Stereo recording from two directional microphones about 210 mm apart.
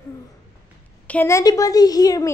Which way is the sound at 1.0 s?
10° left (ahead or behind).